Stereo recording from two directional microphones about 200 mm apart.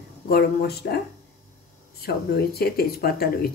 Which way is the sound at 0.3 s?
50° left (ahead or behind).